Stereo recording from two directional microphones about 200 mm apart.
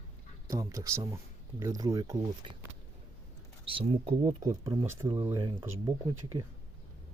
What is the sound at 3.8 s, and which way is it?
Speech, 25° right (ahead or behind).